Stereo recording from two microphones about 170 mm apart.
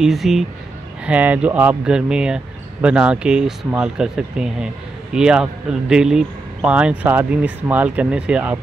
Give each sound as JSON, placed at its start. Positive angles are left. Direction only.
{"t": 0.0, "sound": "speech", "side_deg": 0}